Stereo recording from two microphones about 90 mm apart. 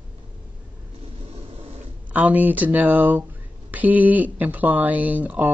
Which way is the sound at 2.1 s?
20° right (ahead or behind).